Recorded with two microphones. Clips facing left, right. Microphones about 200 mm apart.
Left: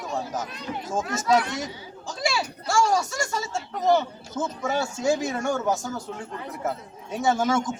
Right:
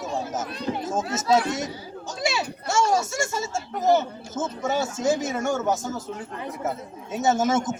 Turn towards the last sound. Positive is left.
turn(degrees=-20)  # may be behind; listen again after turning